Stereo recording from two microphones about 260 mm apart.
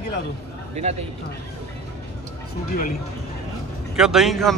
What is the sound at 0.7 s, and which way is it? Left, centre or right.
Speech, right.